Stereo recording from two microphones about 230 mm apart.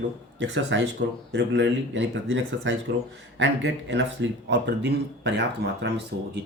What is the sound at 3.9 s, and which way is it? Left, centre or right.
Speech, right.